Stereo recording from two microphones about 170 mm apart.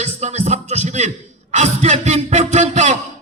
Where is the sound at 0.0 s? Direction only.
40° right (ahead or behind).